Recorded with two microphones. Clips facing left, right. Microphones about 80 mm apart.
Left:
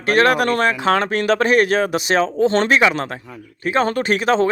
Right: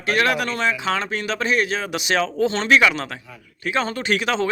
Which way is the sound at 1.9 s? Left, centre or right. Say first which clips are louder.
Left 4 dB; left.